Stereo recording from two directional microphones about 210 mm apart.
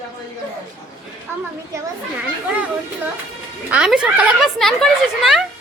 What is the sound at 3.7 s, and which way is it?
Speech, 5° right (ahead or behind).